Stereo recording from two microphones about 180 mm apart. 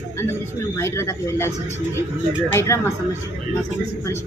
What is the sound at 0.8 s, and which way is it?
Speech, 15° left (ahead or behind).